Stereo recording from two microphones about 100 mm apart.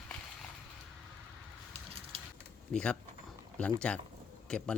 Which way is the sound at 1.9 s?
70° right (ahead or behind).